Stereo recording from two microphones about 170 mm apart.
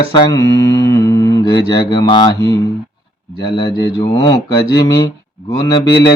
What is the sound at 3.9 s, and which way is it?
Speech, 25° left (ahead or behind).